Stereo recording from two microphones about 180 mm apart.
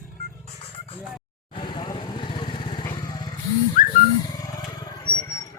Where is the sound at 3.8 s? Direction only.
45° left (ahead or behind).